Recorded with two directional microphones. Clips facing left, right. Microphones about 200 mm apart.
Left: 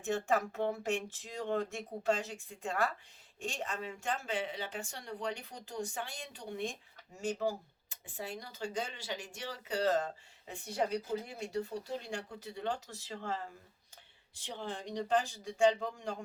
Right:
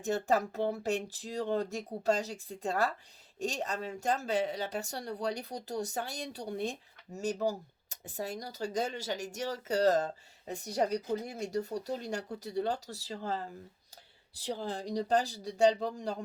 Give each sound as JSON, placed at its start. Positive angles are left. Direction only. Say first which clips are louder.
{"t": 0.0, "sound": "speech", "louder": "right 3 dB", "side_deg": -40}